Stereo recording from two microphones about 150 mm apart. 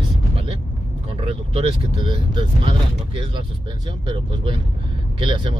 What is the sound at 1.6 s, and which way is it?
Speech, 40° right (ahead or behind).